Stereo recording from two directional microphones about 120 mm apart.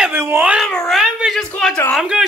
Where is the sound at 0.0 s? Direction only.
15° right (ahead or behind).